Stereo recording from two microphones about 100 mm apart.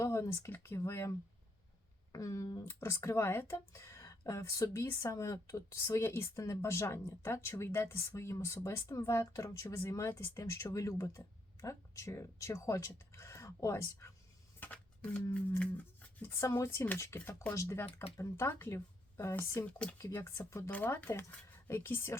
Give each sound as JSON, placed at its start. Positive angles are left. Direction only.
{"t": 0.0, "sound": "speech", "side_deg": 30}
{"t": 2.1, "sound": "speech", "side_deg": 35}
{"t": 14.6, "sound": "a sound", "side_deg": 15}
{"t": 16.2, "sound": "speech", "side_deg": 30}
{"t": 17.2, "sound": "speech", "side_deg": 15}
{"t": 17.5, "sound": "speech", "side_deg": 30}